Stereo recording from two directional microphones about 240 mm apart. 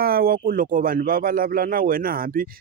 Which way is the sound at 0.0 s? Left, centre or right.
Right.